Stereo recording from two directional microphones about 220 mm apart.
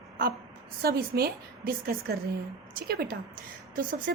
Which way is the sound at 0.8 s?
45° right (ahead or behind).